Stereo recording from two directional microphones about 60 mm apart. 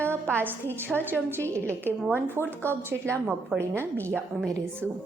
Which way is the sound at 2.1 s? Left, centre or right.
Right.